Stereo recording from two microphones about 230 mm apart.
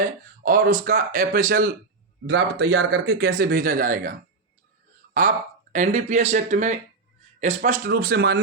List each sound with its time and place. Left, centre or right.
0.4 s speech: right
5.7 s speech: right